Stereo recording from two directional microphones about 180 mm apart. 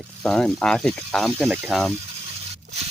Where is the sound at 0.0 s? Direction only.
Centre (ahead or behind).